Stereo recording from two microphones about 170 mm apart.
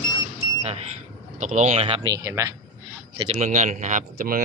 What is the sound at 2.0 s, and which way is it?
Speech, 20° right (ahead or behind).